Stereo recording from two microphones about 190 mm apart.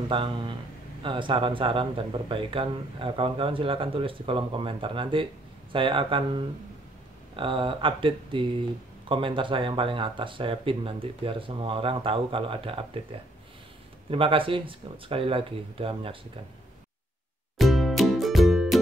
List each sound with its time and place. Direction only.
0.1 s speech: 25° right (ahead or behind)
14.1 s speech: 30° right (ahead or behind)
17.6 s music: centre (ahead or behind)